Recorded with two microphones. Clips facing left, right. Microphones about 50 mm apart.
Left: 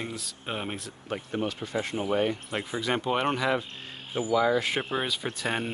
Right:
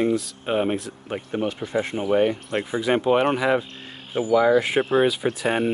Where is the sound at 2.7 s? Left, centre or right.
Centre.